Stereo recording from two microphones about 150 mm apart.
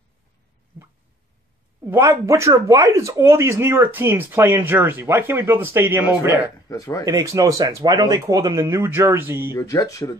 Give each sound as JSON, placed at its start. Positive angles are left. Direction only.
{"t": 1.9, "sound": "speech", "side_deg": -20}
{"t": 6.7, "sound": "speech", "side_deg": 20}
{"t": 7.1, "sound": "speech", "side_deg": -25}
{"t": 9.5, "sound": "speech", "side_deg": 20}